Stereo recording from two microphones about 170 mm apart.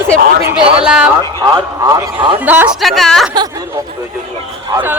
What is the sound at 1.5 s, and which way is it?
Speech, 20° right (ahead or behind).